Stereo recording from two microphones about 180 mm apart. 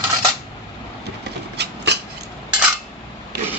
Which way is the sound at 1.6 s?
65° right (ahead or behind).